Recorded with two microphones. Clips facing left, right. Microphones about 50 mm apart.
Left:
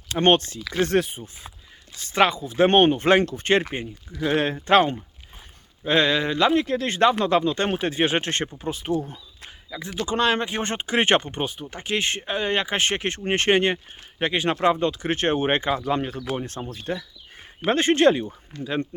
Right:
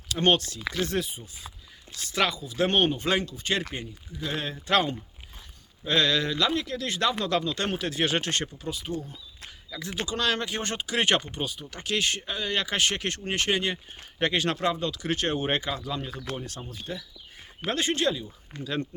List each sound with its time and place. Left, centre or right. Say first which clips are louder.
0.1 s speech: left 5 dB; left
0.9 s speech: left 8 dB; left
2.0 s speech: left 7 dB; left
3.6 s speech: left 5 dB; left
4.4 s speech: left 7 dB; left
9.6 s speech: left 4 dB; centre; by 11.6 s left
11.6 s speech: even; left
13.3 s speech: left 8 dB; left
14.2 s speech: left 3 dB; centre
14.6 s speech: left 7 dB; left
16.7 s speech: left 7 dB; left
18.6 s speech: left 4 dB; left